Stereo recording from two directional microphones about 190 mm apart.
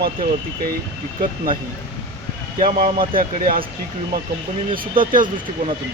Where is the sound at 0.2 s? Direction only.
45° right (ahead or behind).